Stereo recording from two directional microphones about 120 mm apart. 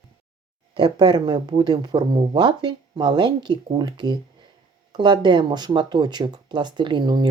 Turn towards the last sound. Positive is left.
turn(degrees=-40)  # may be behind; listen again after turning